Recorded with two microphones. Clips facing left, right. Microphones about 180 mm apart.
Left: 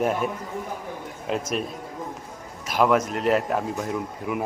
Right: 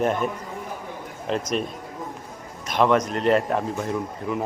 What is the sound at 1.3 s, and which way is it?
Speech, 5° left (ahead or behind).